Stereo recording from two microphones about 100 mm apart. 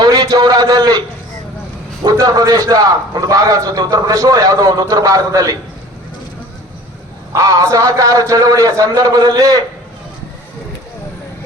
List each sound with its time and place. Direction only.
0.0 s a sound: 40° right (ahead or behind)
2.0 s a man's voice: 40° right (ahead or behind)
7.3 s a man's voice: 35° right (ahead or behind)